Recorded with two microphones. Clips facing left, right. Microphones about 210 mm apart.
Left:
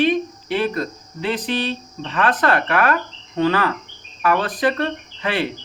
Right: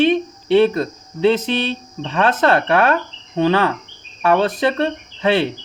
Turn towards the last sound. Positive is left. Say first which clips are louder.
# right 6 dB
turn(degrees=-25)  # may be behind; listen again after turning